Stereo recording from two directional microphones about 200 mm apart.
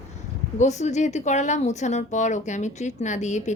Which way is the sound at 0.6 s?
35° left (ahead or behind).